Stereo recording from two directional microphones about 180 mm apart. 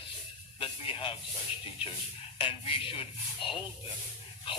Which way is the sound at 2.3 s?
30° left (ahead or behind).